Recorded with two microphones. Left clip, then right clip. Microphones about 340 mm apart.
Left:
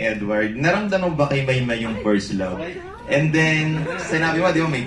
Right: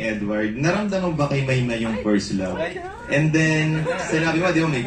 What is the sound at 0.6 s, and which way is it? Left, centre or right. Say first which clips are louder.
A man's voice: left 3 dB; left.